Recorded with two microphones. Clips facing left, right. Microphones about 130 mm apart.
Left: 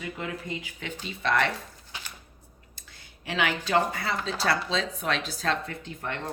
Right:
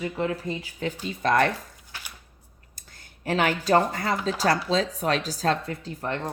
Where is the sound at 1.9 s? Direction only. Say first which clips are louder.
Even; 20° left (ahead or behind).